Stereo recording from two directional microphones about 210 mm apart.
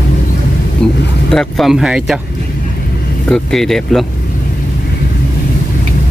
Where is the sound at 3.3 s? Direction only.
Centre (ahead or behind).